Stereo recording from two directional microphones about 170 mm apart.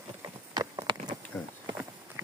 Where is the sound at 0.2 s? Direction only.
20° right (ahead or behind).